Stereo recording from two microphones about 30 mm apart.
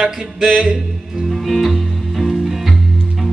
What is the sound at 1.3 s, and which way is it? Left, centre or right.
Music, centre.